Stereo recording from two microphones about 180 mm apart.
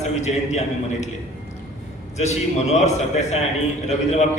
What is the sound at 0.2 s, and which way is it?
Speech, 40° left (ahead or behind).